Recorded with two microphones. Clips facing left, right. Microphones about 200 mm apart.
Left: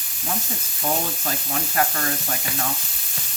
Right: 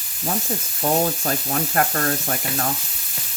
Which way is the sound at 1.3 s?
50° right (ahead or behind).